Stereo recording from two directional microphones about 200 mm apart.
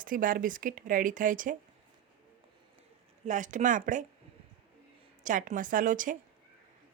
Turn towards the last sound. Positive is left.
turn(degrees=-40)  # may be behind; listen again after turning